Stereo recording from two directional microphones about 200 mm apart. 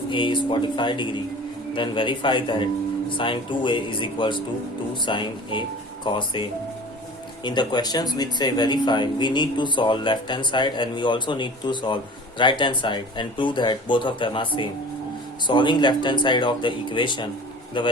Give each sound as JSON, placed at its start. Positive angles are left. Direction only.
{"t": 0.1, "sound": "speech", "side_deg": 25}
{"t": 7.4, "sound": "speech", "side_deg": 20}